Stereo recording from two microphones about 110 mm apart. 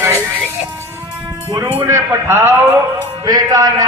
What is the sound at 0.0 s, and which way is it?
Music, 25° right (ahead or behind).